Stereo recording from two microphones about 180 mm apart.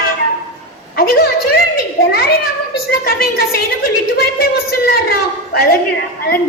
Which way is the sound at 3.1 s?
55° left (ahead or behind).